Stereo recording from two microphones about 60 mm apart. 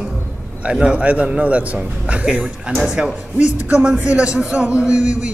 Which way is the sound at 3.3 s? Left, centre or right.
Right.